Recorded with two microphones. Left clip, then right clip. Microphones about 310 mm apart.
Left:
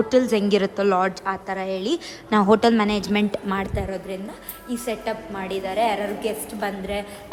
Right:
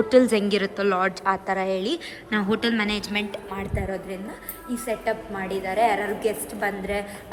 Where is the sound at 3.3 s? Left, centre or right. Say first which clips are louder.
Left 6 dB; left.